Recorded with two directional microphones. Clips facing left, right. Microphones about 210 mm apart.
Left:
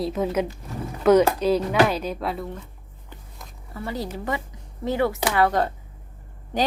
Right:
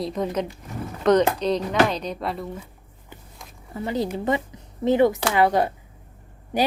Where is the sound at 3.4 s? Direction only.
Centre (ahead or behind).